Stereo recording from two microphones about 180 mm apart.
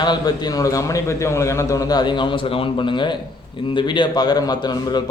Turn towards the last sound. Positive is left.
turn(degrees=25)  # may be behind; listen again after turning